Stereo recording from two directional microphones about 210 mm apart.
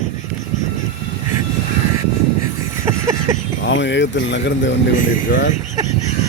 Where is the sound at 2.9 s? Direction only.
15° right (ahead or behind).